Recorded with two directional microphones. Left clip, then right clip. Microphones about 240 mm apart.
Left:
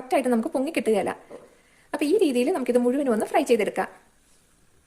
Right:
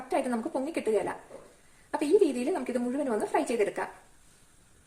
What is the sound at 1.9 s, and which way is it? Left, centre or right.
A woman's voice, left.